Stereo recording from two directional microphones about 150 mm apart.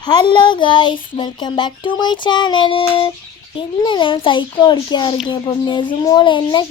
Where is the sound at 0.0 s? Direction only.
30° left (ahead or behind).